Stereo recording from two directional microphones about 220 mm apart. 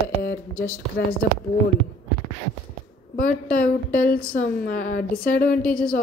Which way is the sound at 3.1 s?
40° left (ahead or behind).